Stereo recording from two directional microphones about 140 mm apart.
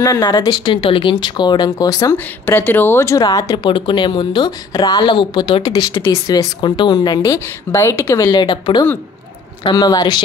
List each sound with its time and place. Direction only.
0.0 s speech: 25° left (ahead or behind)
2.1 s speech: 15° left (ahead or behind)
7.3 s speech: 20° left (ahead or behind)